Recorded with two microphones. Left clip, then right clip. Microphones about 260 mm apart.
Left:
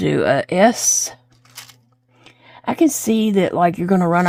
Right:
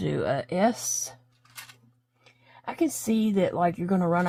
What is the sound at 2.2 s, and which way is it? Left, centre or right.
Speech, left.